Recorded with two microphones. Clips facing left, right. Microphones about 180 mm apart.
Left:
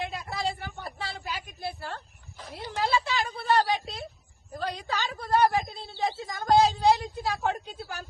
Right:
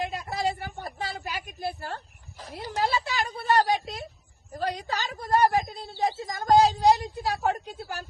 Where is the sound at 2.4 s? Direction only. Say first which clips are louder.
Right 2 dB; 40° right (ahead or behind).